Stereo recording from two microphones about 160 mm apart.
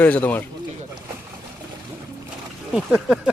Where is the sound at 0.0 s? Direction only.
10° left (ahead or behind).